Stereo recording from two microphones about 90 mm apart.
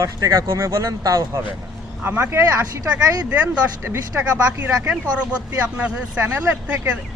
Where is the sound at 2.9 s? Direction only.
15° right (ahead or behind).